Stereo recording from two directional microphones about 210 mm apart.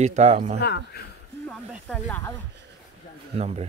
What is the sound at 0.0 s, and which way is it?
Speech, 30° right (ahead or behind).